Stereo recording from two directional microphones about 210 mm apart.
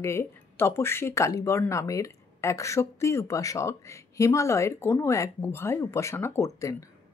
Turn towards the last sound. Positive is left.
turn(degrees=15)  # may be behind; listen again after turning